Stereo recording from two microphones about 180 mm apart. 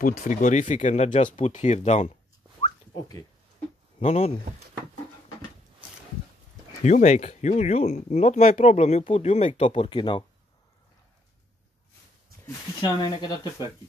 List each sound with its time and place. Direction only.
0.0 s speech: 50° left (ahead or behind)
2.6 s a sound: 25° left (ahead or behind)
4.0 s speech: 35° left (ahead or behind)
6.8 s speech: 40° left (ahead or behind)
12.8 s speech: 25° left (ahead or behind)